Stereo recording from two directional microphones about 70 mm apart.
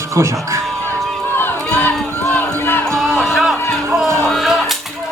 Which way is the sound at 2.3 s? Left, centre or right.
Left.